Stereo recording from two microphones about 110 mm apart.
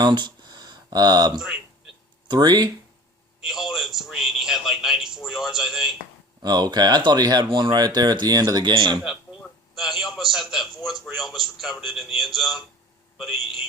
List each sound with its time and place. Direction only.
0.0 s a sound: 40° right (ahead or behind)
2.2 s speech: 40° right (ahead or behind)
3.4 s speech: 5° right (ahead or behind)
6.4 s speech: 40° right (ahead or behind)
8.7 s speech: 45° right (ahead or behind)
9.7 s speech: centre (ahead or behind)